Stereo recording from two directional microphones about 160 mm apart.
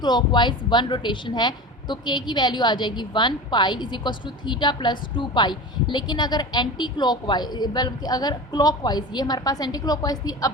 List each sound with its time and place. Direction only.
0.0 s speech: 25° left (ahead or behind)